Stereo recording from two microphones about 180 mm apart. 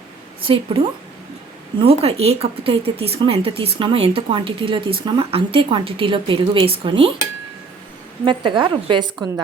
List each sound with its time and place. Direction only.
0.4 s speech: 30° right (ahead or behind)
1.8 s speech: 30° right (ahead or behind)
8.2 s speech: 25° right (ahead or behind)